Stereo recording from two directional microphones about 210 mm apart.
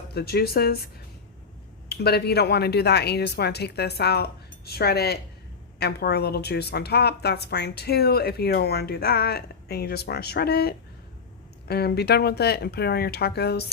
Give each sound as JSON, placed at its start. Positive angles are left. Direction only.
{"t": 0.1, "sound": "a woman's voice", "side_deg": 50}
{"t": 1.9, "sound": "a woman's voice", "side_deg": 50}